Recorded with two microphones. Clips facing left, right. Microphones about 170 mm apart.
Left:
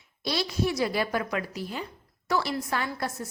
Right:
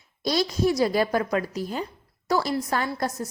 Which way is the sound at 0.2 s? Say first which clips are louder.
Right 5 dB; 40° right (ahead or behind).